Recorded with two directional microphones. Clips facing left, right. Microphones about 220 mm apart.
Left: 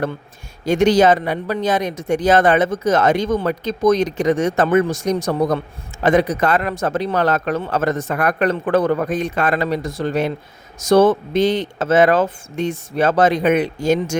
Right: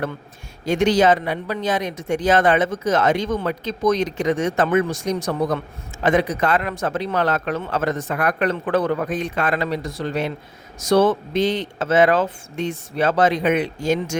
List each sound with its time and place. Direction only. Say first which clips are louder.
0.6 s speech: left 3 dB; 40° left (ahead or behind)